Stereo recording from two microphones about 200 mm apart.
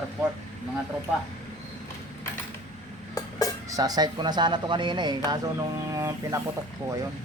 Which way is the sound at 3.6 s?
20° right (ahead or behind).